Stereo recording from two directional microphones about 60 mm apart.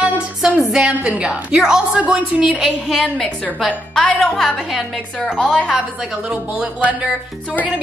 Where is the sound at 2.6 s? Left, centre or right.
Centre.